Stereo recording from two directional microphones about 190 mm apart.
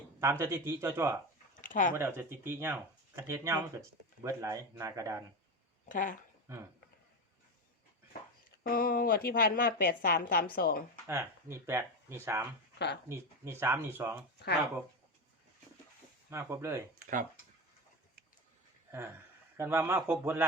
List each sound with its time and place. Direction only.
0.2 s speech: 15° right (ahead or behind)
1.5 s a sound: 45° left (ahead or behind)
2.0 s speech: 10° right (ahead or behind)
5.9 s a woman's voice: 45° left (ahead or behind)
6.5 s speech: 15° right (ahead or behind)
8.6 s a woman's voice: 50° left (ahead or behind)
11.1 s speech: 15° right (ahead or behind)
16.3 s speech: 15° right (ahead or behind)
18.9 s speech: 15° right (ahead or behind)